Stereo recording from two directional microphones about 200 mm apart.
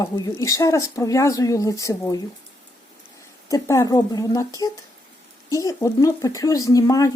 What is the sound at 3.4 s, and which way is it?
Speech, 15° left (ahead or behind).